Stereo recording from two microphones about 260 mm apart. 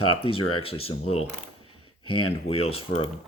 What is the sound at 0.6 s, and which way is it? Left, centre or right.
Speech, left.